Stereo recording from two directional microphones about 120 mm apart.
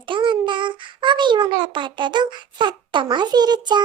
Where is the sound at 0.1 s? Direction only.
40° right (ahead or behind).